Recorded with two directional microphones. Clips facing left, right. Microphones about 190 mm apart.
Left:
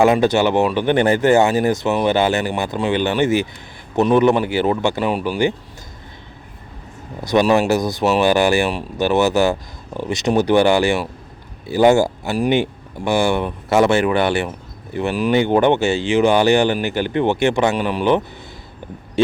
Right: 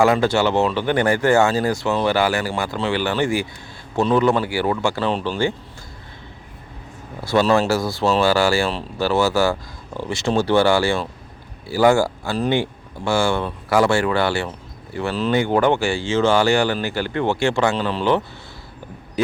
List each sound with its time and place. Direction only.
0.0 s speech: 20° left (ahead or behind)
7.2 s speech: 15° left (ahead or behind)